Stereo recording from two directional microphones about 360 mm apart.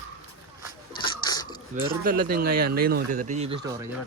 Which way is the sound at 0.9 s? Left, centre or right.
Centre.